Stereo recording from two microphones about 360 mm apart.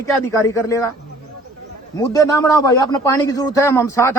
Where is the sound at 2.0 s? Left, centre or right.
Centre.